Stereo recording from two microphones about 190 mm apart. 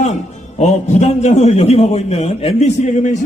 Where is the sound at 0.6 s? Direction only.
35° left (ahead or behind).